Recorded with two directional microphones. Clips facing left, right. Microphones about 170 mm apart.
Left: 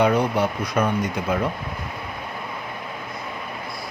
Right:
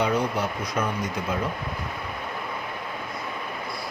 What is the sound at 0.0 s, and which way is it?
Speech, 60° left (ahead or behind).